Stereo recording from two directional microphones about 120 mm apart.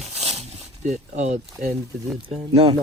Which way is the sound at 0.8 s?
80° right.